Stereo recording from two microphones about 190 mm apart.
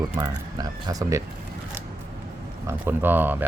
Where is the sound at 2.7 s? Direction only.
10° right (ahead or behind).